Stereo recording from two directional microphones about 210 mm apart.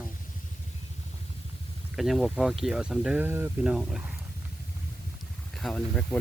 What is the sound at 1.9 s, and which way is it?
Speech, centre (ahead or behind).